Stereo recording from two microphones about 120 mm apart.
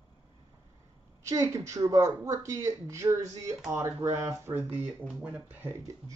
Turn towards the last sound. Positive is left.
turn(degrees=-15)  # may be behind; listen again after turning